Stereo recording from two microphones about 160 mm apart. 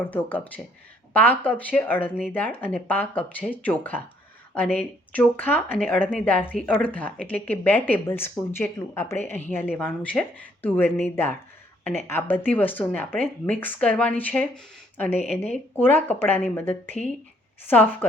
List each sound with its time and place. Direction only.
0.3 s speech: 10° left (ahead or behind)
15.1 s speech: 40° left (ahead or behind)
15.5 s speech: 10° left (ahead or behind)
16.9 s speech: 45° left (ahead or behind)